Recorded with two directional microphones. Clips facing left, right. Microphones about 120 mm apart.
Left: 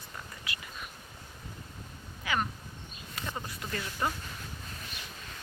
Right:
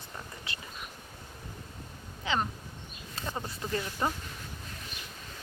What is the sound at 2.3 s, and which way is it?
A woman's voice, 25° right (ahead or behind).